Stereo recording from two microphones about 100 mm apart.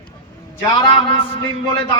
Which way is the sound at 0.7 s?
50° left (ahead or behind).